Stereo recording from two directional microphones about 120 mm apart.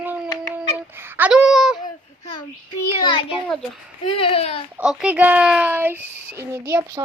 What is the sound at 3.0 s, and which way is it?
Speech, 40° left (ahead or behind).